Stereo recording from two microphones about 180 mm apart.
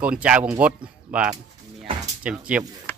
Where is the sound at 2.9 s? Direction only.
10° left (ahead or behind).